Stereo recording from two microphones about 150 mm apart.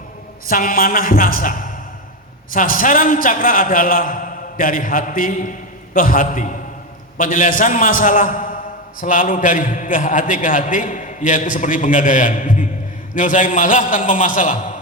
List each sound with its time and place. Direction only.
0.4 s a man's voice: 70° left (ahead or behind)